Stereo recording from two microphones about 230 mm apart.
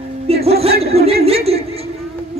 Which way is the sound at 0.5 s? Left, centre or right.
Right.